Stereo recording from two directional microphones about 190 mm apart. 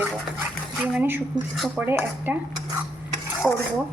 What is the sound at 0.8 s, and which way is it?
Dishes, 5° right (ahead or behind).